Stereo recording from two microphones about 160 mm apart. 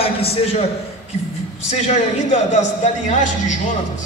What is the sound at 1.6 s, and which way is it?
A man's voice, 45° left (ahead or behind).